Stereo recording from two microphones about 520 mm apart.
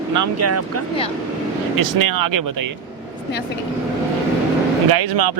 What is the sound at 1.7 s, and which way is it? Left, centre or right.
Speech, right.